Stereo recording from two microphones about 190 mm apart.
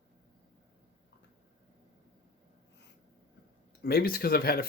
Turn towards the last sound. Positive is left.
turn(degrees=55)  # may be behind; listen again after turning